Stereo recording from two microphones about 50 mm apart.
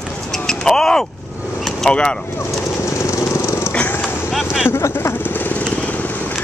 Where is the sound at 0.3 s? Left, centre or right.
Centre.